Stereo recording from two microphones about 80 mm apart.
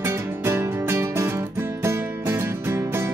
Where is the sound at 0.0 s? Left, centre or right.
Right.